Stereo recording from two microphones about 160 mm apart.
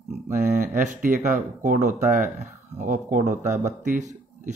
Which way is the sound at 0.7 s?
55° right (ahead or behind).